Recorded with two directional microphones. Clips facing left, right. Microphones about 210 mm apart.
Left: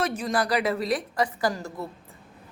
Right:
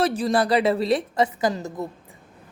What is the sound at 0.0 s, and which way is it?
A woman's voice, 35° right (ahead or behind).